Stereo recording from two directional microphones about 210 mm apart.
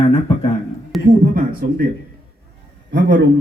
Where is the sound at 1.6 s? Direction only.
45° right (ahead or behind).